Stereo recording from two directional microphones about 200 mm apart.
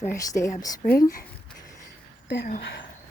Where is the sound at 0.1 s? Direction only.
15° left (ahead or behind).